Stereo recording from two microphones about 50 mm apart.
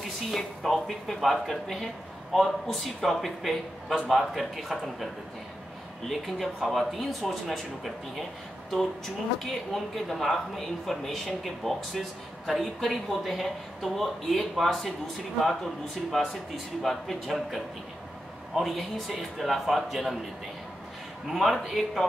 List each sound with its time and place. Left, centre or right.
0.3 s a woman's voice: centre
6.0 s a woman's voice: centre
21.3 s a woman's voice: centre